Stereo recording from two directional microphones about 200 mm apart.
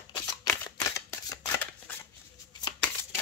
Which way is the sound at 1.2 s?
10° left (ahead or behind).